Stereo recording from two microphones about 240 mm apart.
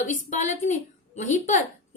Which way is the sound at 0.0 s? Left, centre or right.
Left.